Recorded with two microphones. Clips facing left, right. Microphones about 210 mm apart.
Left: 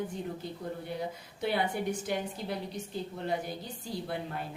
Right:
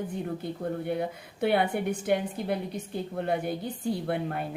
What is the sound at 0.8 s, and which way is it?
A woman's voice, 60° right (ahead or behind).